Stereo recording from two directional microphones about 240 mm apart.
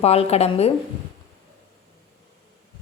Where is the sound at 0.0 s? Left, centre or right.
Left.